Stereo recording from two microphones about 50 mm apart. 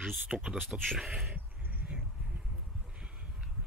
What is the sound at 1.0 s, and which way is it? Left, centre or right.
Speech, centre.